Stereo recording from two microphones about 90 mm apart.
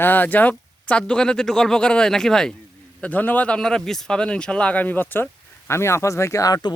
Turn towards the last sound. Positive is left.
turn(degrees=40)  # may be behind; listen again after turning